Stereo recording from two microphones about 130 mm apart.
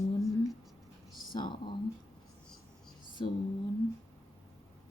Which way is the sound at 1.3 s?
35° left (ahead or behind).